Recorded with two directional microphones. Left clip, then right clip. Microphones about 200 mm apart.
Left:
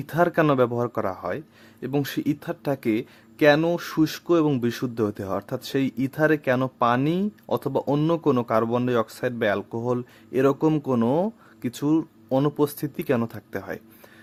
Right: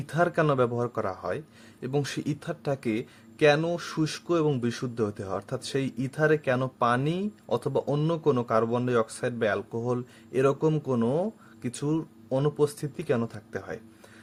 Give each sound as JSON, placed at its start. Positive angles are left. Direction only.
{"t": 0.0, "sound": "speech", "side_deg": 30}